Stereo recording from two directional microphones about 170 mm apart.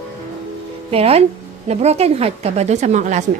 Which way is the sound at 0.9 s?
35° right (ahead or behind).